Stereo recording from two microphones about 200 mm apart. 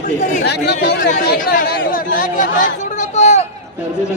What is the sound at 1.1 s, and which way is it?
Speech, 45° left (ahead or behind).